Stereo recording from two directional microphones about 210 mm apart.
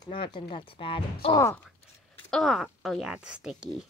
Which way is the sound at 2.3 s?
Centre (ahead or behind).